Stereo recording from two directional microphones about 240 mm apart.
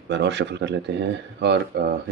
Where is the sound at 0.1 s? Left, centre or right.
Right.